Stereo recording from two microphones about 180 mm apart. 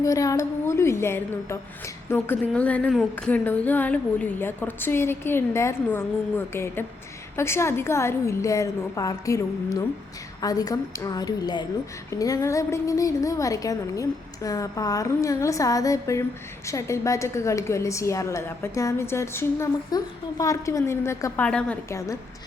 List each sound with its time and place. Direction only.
0.0 s a woman's voice: 20° left (ahead or behind)